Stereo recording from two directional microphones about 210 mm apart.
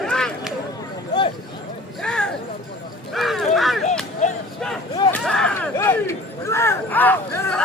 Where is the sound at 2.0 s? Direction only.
5° left (ahead or behind).